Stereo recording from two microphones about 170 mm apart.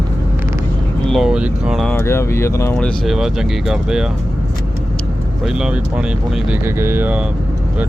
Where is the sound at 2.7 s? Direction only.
Centre (ahead or behind).